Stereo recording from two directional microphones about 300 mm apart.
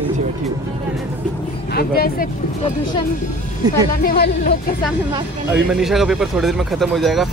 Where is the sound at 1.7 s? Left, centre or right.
Left.